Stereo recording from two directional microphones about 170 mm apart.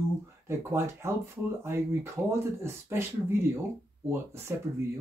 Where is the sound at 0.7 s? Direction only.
15° right (ahead or behind).